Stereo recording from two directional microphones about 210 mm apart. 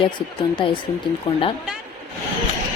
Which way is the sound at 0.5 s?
25° left (ahead or behind).